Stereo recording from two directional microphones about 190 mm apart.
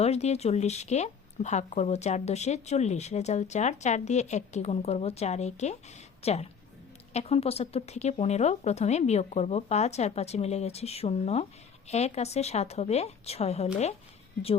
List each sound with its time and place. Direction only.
0.0 s speech: 35° left (ahead or behind)